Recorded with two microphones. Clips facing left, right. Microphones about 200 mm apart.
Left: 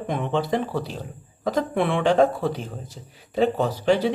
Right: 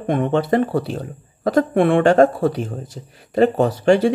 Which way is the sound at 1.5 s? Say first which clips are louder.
Right 7 dB; 50° right (ahead or behind).